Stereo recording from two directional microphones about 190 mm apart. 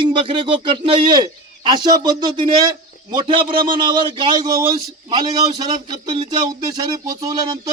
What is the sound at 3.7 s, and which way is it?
Speech, 25° right (ahead or behind).